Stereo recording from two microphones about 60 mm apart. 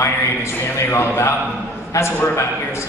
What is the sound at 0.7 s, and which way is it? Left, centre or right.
A man's voice, left.